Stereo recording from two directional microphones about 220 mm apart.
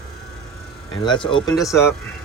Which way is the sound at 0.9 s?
20° left (ahead or behind).